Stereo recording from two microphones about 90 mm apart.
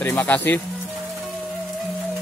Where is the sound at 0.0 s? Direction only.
20° left (ahead or behind).